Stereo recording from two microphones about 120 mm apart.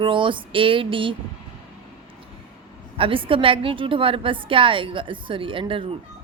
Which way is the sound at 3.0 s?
45° right (ahead or behind).